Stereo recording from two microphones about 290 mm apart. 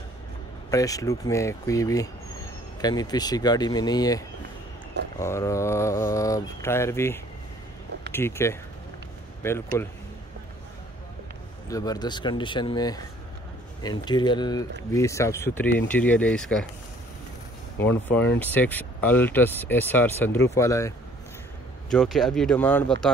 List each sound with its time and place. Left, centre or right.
0.7 s speech: centre
5.2 s speech: centre
9.7 s speech: centre
11.7 s speech: centre
17.8 s speech: centre
21.9 s speech: centre